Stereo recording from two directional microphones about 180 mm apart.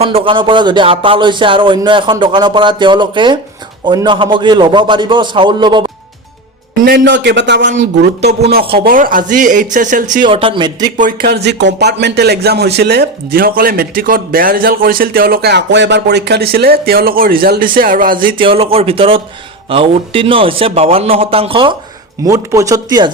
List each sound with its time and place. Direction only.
0.0 s speech: 30° right (ahead or behind)
7.0 s speech: 80° right
8.8 s speech: 50° right (ahead or behind)
10.2 s speech: 30° right (ahead or behind)
10.9 s speech: 45° right (ahead or behind)
11.3 s speech: 70° right (ahead or behind); by 18.3 s 50° right (ahead or behind)
18.3 s a man's voice: 30° right (ahead or behind)
22.2 s speech: 20° right (ahead or behind)